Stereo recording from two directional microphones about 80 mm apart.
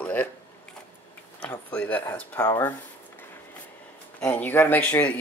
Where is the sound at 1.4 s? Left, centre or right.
Centre.